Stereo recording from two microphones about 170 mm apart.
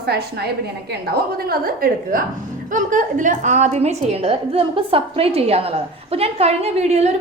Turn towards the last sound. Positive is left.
turn(degrees=-40)  # may be behind; listen again after turning